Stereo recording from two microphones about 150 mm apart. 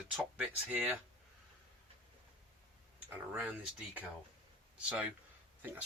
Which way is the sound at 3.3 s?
10° right (ahead or behind).